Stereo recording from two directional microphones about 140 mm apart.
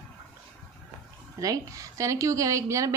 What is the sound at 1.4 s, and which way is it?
A woman's voice, 25° right (ahead or behind).